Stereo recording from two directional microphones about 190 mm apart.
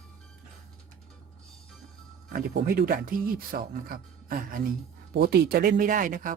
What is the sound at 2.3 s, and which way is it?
Speech, 50° right (ahead or behind).